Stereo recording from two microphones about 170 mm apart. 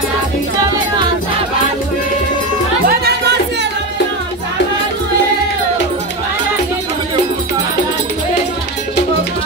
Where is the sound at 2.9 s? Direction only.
70° right (ahead or behind).